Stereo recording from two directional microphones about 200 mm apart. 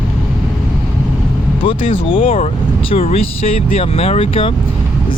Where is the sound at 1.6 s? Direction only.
25° left (ahead or behind).